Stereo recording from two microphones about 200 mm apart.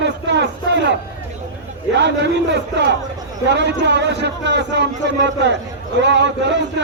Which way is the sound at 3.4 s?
60° right (ahead or behind).